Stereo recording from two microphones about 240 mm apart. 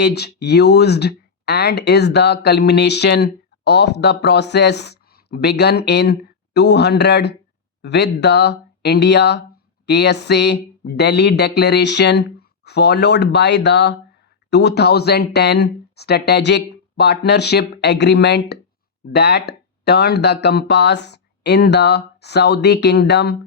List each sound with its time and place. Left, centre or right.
0.0 s speech: left